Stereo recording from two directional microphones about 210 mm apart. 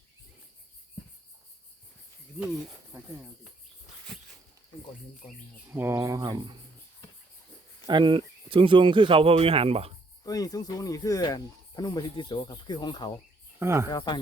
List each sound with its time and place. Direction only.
5.6 s speech: 10° right (ahead or behind)
7.9 s speech: 20° right (ahead or behind)
10.2 s speech: 15° left (ahead or behind)
13.6 s speech: 15° right (ahead or behind)
13.9 s speech: 20° left (ahead or behind)